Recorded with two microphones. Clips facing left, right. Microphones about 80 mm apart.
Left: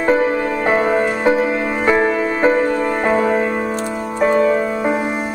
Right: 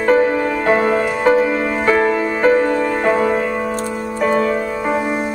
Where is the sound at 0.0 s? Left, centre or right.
Centre.